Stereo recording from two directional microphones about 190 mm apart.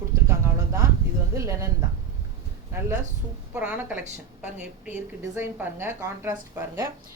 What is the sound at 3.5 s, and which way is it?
A woman's voice, 5° right (ahead or behind).